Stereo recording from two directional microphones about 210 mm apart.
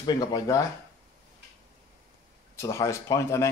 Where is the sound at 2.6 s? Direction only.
15° left (ahead or behind).